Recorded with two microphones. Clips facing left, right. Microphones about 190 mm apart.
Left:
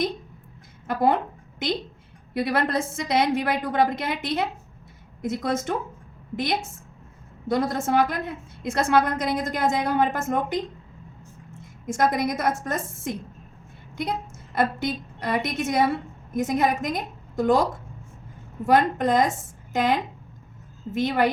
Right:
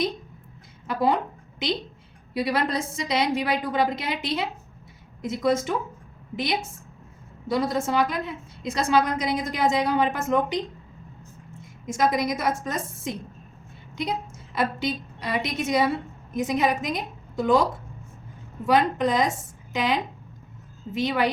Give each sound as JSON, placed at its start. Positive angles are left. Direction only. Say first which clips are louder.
{"t": 0.9, "sound": "a woman's voice", "louder": "left 1 dB", "side_deg": 55}
{"t": 2.3, "sound": "a woman's voice", "louder": "left 1 dB", "side_deg": 55}
{"t": 7.4, "sound": "a woman's voice", "louder": "left 1 dB", "side_deg": 55}
{"t": 11.9, "sound": "a woman's voice", "louder": "even", "side_deg": 55}